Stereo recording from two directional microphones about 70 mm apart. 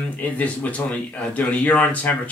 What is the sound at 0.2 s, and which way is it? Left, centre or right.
Speech, left.